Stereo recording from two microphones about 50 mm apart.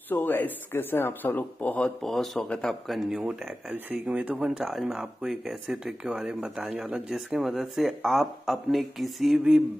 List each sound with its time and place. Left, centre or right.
0.1 s speech: left
1.8 s speech: centre
2.4 s speech: centre
2.9 s speech: centre
4.0 s speech: right
4.6 s speech: centre